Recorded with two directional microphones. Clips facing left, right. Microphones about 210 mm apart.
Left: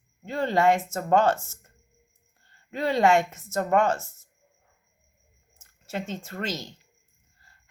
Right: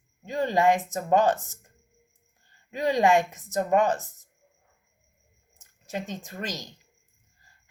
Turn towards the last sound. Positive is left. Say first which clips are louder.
# left 3 dB
turn(degrees=-15)  # may be behind; listen again after turning